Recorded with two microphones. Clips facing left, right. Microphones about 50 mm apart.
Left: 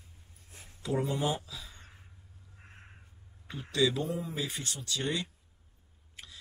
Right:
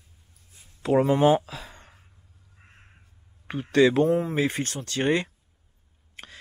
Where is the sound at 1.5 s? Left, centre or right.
Right.